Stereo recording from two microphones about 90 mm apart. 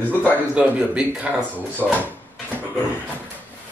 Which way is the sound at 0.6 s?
10° right (ahead or behind).